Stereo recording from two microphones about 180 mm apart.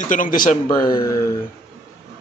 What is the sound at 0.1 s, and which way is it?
Speech, 50° left (ahead or behind).